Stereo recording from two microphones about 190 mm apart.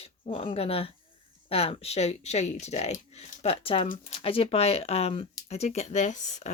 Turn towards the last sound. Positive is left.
turn(degrees=40)  # may be behind; listen again after turning